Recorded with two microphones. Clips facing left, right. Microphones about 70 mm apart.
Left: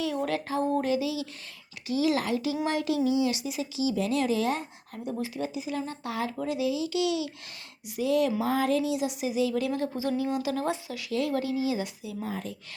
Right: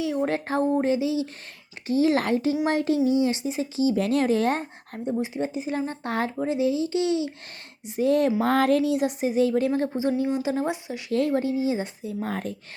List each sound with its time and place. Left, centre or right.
0.0 s a sound: centre
0.3 s speech: right
0.7 s a sound: right
1.9 s speech: right
6.4 s speech: right
8.4 s speech: right
12.2 s speech: right